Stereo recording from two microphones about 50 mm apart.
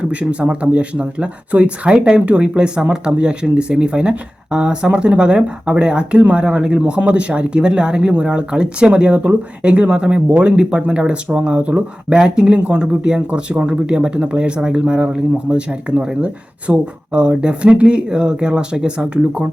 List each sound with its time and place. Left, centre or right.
0.0 s speech: right